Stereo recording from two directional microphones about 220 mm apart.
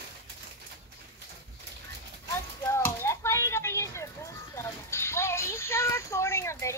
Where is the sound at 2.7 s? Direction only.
10° left (ahead or behind).